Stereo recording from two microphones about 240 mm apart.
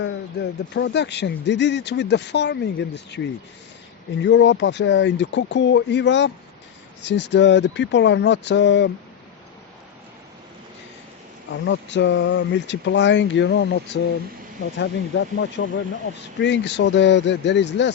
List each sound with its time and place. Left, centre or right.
0.7 s a man's voice: left
4.2 s a man's voice: left
11.5 s a man's voice: left